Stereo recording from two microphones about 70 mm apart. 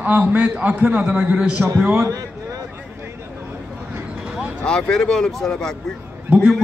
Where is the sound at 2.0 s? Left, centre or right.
Right.